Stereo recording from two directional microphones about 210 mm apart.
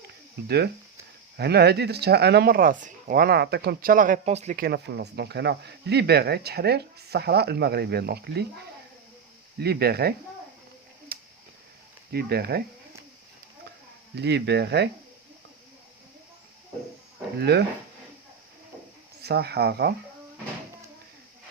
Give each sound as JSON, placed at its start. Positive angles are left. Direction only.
{"t": 0.4, "sound": "speech", "side_deg": -50}
{"t": 4.6, "sound": "speech", "side_deg": -50}
{"t": 9.6, "sound": "speech", "side_deg": -50}
{"t": 11.1, "sound": "a sound", "side_deg": -45}
{"t": 12.1, "sound": "speech", "side_deg": -50}
{"t": 14.2, "sound": "speech", "side_deg": -55}
{"t": 17.5, "sound": "speech", "side_deg": -50}
{"t": 19.2, "sound": "speech", "side_deg": -50}